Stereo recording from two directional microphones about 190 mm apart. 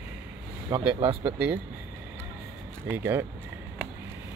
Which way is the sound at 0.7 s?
30° right (ahead or behind).